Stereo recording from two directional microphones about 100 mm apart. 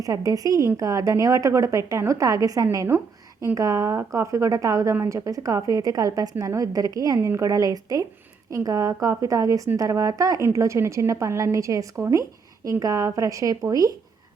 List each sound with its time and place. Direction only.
0.0 s a woman's voice: 35° right (ahead or behind)